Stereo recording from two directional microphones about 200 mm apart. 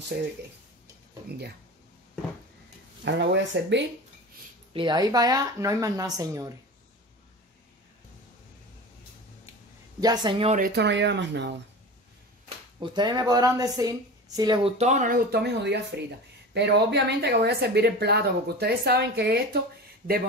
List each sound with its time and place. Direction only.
3.0 s a woman's voice: 65° right (ahead or behind)
4.7 s speech: 20° right (ahead or behind)
9.9 s speech: 20° right (ahead or behind)
10.6 s a woman's voice: 60° right (ahead or behind)
12.8 s speech: 20° right (ahead or behind)
14.8 s a woman's voice: 35° right (ahead or behind); by 19.6 s 55° right (ahead or behind)